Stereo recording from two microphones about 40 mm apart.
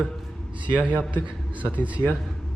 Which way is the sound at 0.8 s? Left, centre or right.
Right.